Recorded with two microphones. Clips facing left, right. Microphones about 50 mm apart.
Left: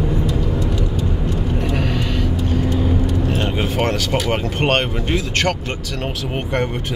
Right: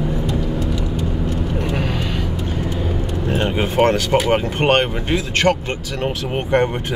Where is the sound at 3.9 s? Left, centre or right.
Centre.